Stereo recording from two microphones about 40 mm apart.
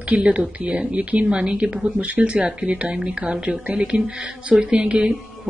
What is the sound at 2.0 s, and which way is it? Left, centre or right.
Speech, right.